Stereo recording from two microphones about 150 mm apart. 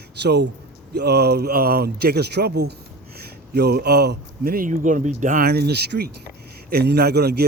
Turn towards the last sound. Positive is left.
turn(degrees=-90)